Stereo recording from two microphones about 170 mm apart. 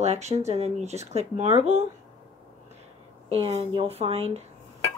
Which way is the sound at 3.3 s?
35° right (ahead or behind).